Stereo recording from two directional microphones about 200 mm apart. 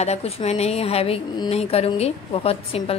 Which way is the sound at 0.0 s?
30° left (ahead or behind).